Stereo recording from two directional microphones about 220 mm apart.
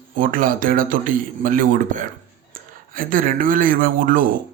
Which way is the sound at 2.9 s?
40° right (ahead or behind).